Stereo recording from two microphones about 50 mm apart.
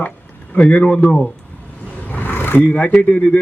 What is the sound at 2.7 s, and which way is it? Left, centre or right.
Speech, left.